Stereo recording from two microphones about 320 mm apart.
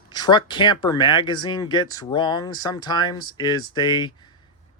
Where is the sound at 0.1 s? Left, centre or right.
Centre.